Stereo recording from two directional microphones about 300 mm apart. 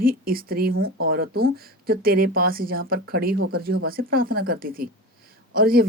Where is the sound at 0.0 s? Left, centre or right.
Right.